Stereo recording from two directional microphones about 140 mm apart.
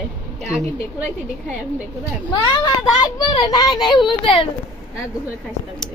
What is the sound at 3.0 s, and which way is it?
A child's voice, 30° left (ahead or behind).